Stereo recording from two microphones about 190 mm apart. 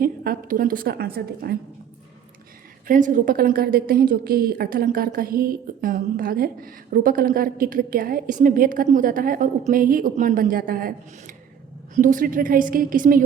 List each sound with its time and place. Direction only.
0.0 s a woman's voice: 45° right (ahead or behind)
2.8 s a woman's voice: 45° right (ahead or behind)